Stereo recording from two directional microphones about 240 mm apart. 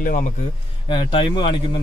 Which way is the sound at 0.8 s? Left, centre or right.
Centre.